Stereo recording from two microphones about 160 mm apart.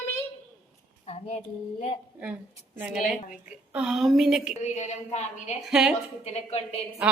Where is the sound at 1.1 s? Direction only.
40° left (ahead or behind).